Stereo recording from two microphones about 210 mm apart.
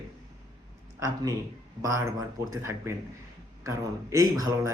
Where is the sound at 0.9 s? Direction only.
15° right (ahead or behind).